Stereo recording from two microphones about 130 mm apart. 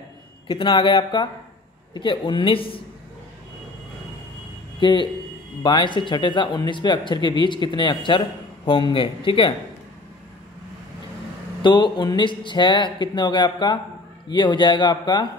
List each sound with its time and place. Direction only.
0.5 s speech: 40° left (ahead or behind)
4.7 s speech: 35° left (ahead or behind)
11.6 s speech: 35° left (ahead or behind)